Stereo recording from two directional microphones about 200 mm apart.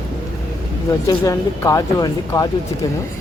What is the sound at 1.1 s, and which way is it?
Speech, 15° left (ahead or behind).